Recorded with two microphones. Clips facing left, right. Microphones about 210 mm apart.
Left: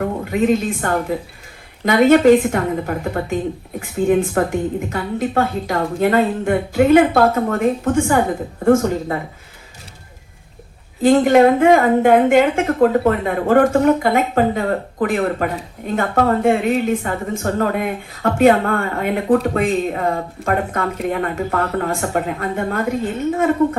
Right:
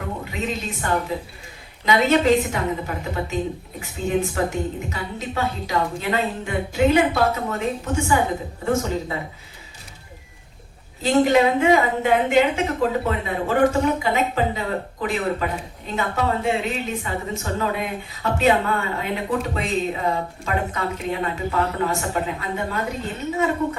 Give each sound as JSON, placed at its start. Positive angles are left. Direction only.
{"t": 0.0, "sound": "a woman's voice", "side_deg": 55}
{"t": 11.0, "sound": "a woman's voice", "side_deg": 55}